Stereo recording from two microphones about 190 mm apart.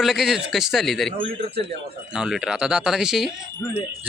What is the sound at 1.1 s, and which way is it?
Speech, 30° right (ahead or behind).